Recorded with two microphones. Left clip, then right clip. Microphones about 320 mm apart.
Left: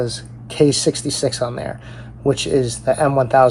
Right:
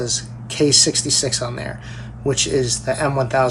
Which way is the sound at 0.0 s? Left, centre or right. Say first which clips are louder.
Even; centre.